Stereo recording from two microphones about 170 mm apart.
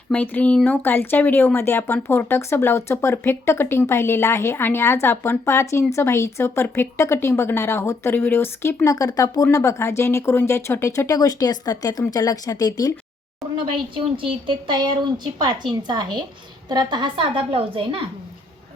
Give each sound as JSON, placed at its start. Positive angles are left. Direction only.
{"t": 0.1, "sound": "speech", "side_deg": 10}
{"t": 13.6, "sound": "a woman's voice", "side_deg": -30}